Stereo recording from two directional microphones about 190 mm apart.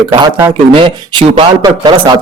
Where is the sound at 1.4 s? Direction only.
25° right (ahead or behind).